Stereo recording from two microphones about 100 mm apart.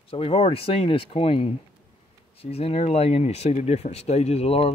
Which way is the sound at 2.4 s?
85° left.